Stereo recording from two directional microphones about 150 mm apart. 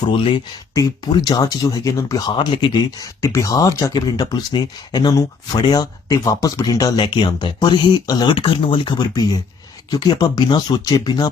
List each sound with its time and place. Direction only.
0.1 s speech: 35° left (ahead or behind)